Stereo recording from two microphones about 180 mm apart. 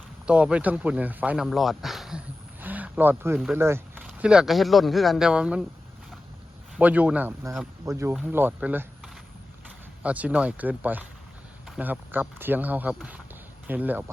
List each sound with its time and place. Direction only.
0.3 s speech: 5° right (ahead or behind)
6.7 s speech: 10° right (ahead or behind)
10.0 s speech: 5° right (ahead or behind)